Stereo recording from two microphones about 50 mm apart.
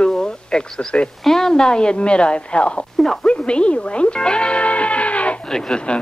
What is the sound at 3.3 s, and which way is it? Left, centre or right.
Music, left.